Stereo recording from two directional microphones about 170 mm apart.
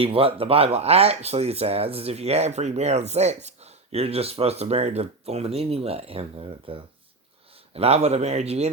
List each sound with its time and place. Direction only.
0.0 s speech: 35° right (ahead or behind)